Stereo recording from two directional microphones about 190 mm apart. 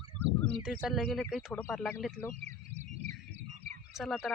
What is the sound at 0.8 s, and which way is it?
Speech, centre (ahead or behind).